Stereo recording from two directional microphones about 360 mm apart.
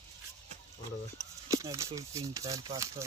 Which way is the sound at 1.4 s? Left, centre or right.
Centre.